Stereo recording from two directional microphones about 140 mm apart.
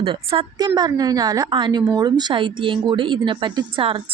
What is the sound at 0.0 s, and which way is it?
Speech, 45° right (ahead or behind).